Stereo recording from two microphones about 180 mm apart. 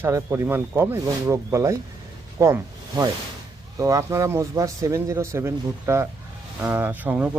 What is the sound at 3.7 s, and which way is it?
Speech, 15° right (ahead or behind).